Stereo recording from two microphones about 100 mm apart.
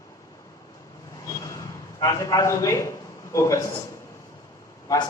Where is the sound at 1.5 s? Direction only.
30° left (ahead or behind).